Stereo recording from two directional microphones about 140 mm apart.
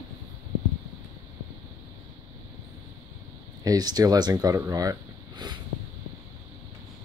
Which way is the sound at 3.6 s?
25° right (ahead or behind).